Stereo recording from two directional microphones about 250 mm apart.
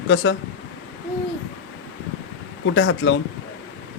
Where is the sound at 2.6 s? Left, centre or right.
Left.